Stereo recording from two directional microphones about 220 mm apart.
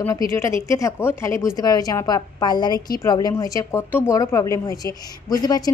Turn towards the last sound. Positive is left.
turn(degrees=15)  # may be behind; listen again after turning